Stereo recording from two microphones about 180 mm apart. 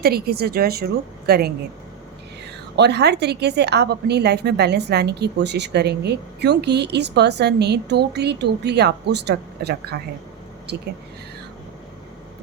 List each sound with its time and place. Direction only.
0.0 s speech: 60° right (ahead or behind)
2.7 s a woman's voice: 70° right (ahead or behind)